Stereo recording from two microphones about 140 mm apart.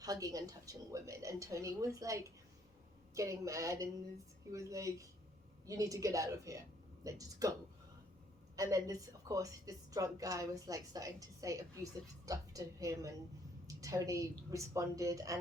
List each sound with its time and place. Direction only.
0.0 s a woman's voice: 25° right (ahead or behind)
8.5 s a woman's voice: 25° right (ahead or behind)